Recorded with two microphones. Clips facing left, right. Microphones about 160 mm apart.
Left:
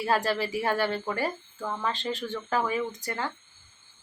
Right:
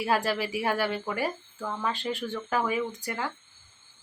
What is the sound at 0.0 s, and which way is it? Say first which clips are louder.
Speech: even; 10° right (ahead or behind).